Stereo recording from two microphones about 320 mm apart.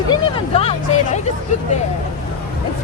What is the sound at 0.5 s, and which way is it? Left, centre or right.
Music, centre.